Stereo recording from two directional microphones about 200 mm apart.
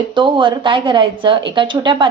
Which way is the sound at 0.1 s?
25° right (ahead or behind).